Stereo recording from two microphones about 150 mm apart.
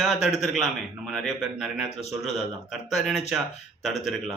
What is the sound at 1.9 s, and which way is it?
Speech, 45° left (ahead or behind).